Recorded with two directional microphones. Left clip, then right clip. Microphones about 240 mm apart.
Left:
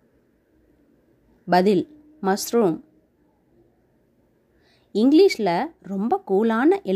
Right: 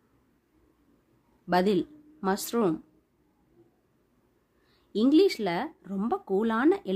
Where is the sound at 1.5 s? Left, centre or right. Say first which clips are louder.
Left 7 dB; left.